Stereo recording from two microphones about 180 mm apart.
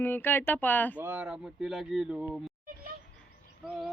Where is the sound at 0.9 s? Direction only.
10° right (ahead or behind).